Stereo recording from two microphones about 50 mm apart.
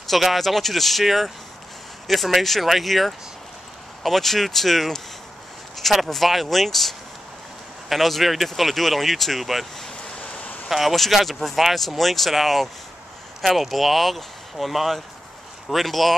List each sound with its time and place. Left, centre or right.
0.1 s speech: centre
10.2 s a sound: left
10.7 s speech: centre